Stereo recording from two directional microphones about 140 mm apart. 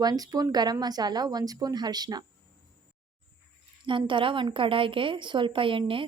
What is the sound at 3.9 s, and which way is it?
A woman's voice, 35° right (ahead or behind).